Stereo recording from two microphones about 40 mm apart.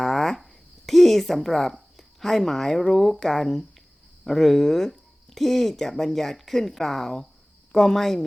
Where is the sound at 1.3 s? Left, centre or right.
Centre.